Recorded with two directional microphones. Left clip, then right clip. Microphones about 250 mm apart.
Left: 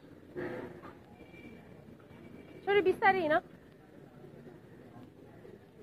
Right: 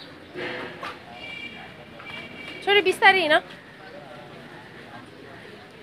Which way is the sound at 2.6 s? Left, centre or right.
Centre.